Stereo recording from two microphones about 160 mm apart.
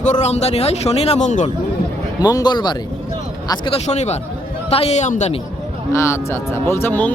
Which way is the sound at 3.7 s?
45° left (ahead or behind).